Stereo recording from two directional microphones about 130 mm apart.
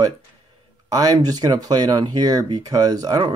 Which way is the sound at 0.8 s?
30° right (ahead or behind).